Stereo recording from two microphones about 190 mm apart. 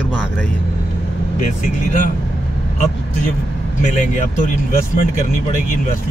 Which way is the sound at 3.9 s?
40° left (ahead or behind).